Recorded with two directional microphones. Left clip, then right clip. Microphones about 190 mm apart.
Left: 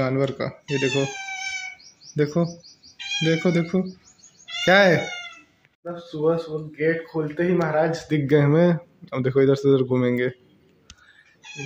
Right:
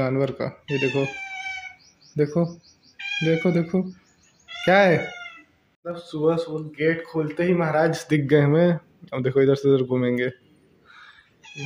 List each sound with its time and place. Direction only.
0.0 s speech: centre (ahead or behind)
2.1 s speech: centre (ahead or behind)
5.9 s speech: 15° right (ahead or behind)
7.8 s speech: 50° right (ahead or behind)
8.3 s speech: centre (ahead or behind)